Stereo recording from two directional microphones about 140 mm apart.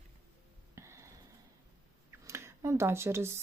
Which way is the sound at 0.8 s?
20° right (ahead or behind).